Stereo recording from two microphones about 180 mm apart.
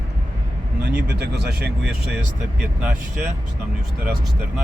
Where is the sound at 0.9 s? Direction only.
60° right (ahead or behind).